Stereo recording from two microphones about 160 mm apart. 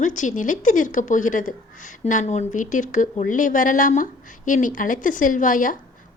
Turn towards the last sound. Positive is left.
turn(degrees=55)  # may be behind; listen again after turning